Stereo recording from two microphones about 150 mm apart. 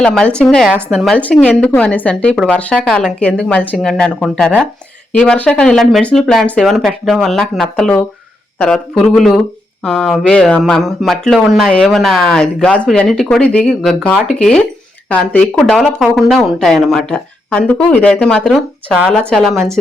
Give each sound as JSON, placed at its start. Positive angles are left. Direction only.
{"t": 0.0, "sound": "speech", "side_deg": 5}
{"t": 19.5, "sound": "a woman's voice", "side_deg": -20}